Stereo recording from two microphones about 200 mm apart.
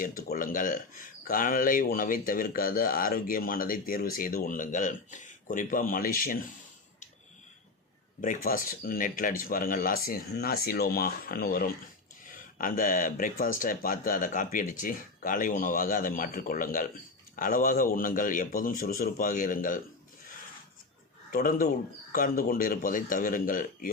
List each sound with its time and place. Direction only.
0.2 s speech: 45° left (ahead or behind)
8.2 s speech: 45° left (ahead or behind)
21.3 s speech: 45° left (ahead or behind)